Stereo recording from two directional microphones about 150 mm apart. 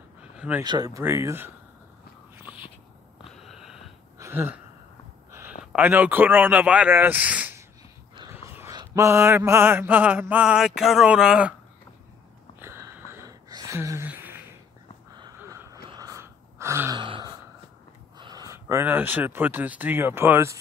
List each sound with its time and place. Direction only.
0.4 s speech: 10° right (ahead or behind)
0.7 s speech: 25° right (ahead or behind)
2.3 s a sound: 10° right (ahead or behind)
3.3 s a sound: centre (ahead or behind)
4.2 s a sound: 15° right (ahead or behind)
5.7 s mantra: 10° right (ahead or behind)
8.7 s mantra: 20° right (ahead or behind)
12.5 s wheeze: 15° right (ahead or behind)
13.7 s a sound: 20° right (ahead or behind)
15.1 s gasp: 25° right (ahead or behind)
16.9 s gasp: 30° right (ahead or behind)
18.1 s speech: 25° right (ahead or behind)